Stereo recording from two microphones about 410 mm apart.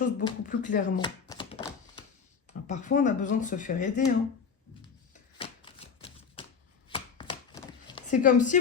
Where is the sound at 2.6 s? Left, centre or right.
Centre.